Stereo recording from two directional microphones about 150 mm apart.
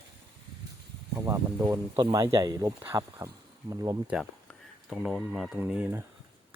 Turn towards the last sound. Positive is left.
turn(degrees=-15)  # may be behind; listen again after turning